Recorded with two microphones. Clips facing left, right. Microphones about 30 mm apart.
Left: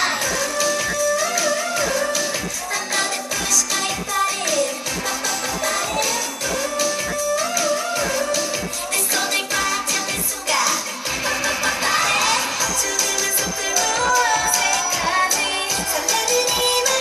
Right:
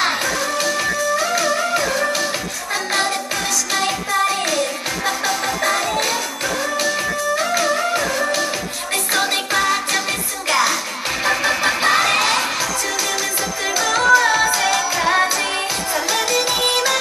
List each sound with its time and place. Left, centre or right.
0.0 s music: right
5.0 s music: right
7.3 s music: right
11.2 s music: right
13.7 s music: right